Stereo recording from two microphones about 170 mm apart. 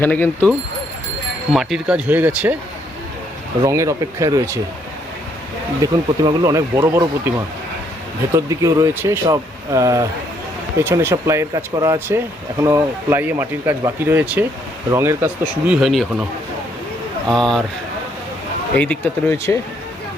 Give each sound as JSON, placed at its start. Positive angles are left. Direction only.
{"t": 0.0, "sound": "speech", "side_deg": 10}
{"t": 1.5, "sound": "speech", "side_deg": -5}
{"t": 3.6, "sound": "speech", "side_deg": -20}
{"t": 5.8, "sound": "speech", "side_deg": -20}
{"t": 8.4, "sound": "speech", "side_deg": -20}
{"t": 17.2, "sound": "speech", "side_deg": 0}
{"t": 18.8, "sound": "speech", "side_deg": 10}